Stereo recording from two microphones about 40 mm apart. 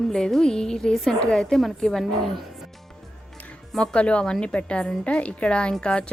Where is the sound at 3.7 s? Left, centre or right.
Left.